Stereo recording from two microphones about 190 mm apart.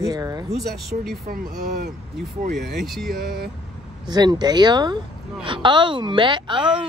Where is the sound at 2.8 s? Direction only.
Centre (ahead or behind).